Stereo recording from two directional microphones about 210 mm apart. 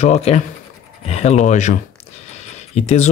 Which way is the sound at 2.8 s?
30° left (ahead or behind).